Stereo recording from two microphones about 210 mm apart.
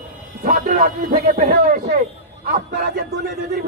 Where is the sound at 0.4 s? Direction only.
40° right (ahead or behind).